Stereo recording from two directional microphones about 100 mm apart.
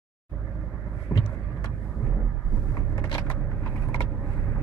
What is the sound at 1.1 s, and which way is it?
Vehicle, 20° left (ahead or behind).